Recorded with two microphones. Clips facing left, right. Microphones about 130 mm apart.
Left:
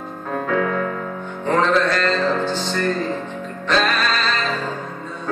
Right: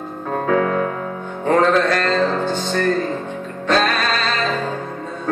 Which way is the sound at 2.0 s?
50° right (ahead or behind).